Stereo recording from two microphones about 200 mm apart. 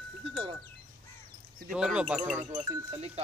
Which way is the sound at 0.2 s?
25° right (ahead or behind).